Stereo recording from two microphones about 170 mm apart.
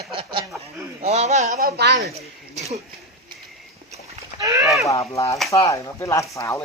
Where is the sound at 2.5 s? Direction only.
40° right (ahead or behind).